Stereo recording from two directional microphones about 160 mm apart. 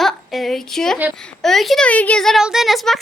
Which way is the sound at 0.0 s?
Centre (ahead or behind).